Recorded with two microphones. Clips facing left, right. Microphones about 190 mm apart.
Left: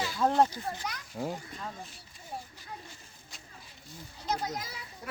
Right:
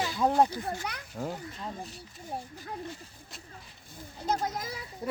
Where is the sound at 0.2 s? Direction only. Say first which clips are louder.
Right 1 dB; 10° right (ahead or behind).